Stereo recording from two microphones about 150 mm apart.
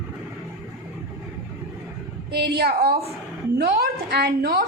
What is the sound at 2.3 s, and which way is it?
A woman's voice, 90° right.